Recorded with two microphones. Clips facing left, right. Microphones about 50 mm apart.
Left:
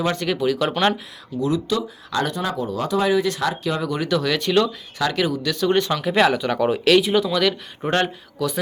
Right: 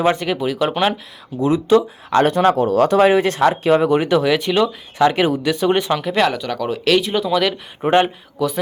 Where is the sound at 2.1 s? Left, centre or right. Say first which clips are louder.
Right 10 dB; right; by 4.7 s centre.